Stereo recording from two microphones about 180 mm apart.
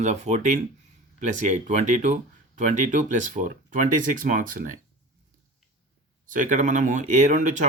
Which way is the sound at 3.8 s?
45° right (ahead or behind).